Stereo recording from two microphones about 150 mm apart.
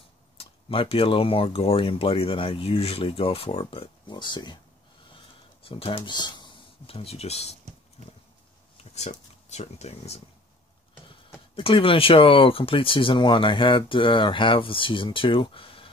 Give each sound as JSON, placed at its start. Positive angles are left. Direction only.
{"t": 0.4, "sound": "speech", "side_deg": 40}
{"t": 5.1, "sound": "a sound", "side_deg": 40}
{"t": 8.9, "sound": "speech", "side_deg": 45}
{"t": 11.5, "sound": "speech", "side_deg": 35}